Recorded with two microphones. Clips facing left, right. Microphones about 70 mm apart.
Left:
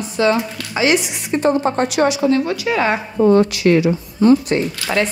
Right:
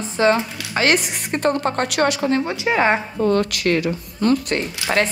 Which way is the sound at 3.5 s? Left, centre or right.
Right.